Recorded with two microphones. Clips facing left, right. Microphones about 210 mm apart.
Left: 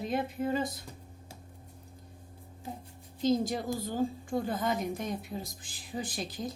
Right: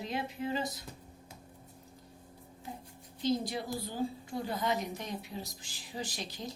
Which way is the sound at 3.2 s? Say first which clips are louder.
Left 4 dB; 45° left (ahead or behind).